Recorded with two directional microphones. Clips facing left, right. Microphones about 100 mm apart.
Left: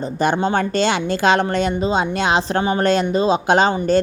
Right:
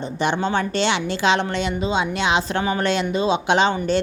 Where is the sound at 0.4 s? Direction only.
45° left (ahead or behind).